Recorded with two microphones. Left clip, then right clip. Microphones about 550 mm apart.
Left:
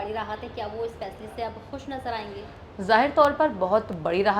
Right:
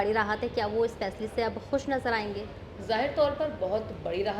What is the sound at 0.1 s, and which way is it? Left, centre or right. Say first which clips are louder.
A woman's voice: right 4 dB; right.